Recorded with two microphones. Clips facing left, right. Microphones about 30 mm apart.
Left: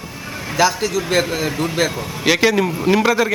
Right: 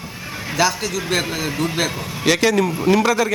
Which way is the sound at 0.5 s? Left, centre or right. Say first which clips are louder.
Left 3 dB; centre.